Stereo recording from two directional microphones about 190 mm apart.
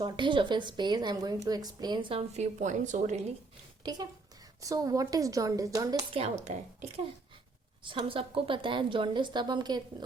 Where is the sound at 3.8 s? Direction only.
20° right (ahead or behind).